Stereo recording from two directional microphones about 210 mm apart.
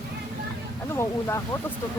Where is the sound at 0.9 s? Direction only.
15° left (ahead or behind).